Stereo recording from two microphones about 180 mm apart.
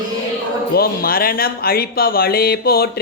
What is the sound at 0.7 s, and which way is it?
Speech, 55° left (ahead or behind).